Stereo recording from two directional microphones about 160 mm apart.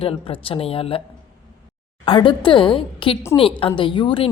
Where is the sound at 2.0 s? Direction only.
30° left (ahead or behind).